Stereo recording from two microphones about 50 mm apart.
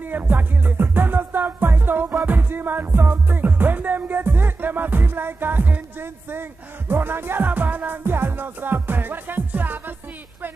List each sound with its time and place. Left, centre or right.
0.1 s music: right